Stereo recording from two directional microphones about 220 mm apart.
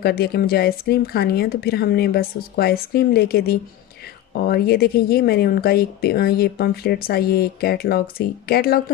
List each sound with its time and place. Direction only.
0.0 s speech: 45° left (ahead or behind)